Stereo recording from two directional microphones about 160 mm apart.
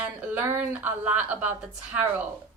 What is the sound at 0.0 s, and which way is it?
A woman's voice, 10° right (ahead or behind).